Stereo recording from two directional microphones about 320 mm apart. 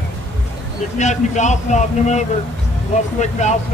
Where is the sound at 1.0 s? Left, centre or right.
Left.